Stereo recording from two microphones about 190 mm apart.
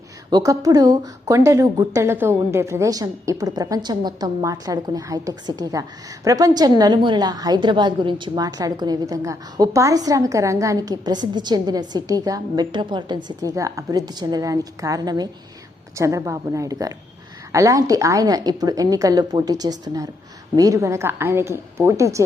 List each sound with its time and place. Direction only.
0.3 s a woman's voice: 20° right (ahead or behind)